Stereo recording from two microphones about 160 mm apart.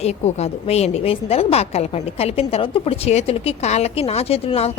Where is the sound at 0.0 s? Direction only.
40° left (ahead or behind).